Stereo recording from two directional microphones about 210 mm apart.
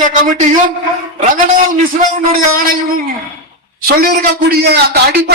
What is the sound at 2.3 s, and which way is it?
A man's voice, 40° right (ahead or behind).